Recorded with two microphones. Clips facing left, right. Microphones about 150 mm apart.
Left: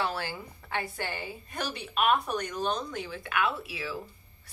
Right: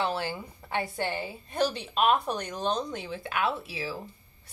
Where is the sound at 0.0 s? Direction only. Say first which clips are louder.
Right 2 dB; 20° right (ahead or behind).